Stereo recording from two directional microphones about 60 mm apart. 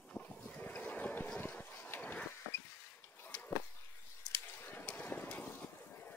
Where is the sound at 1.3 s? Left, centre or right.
Left.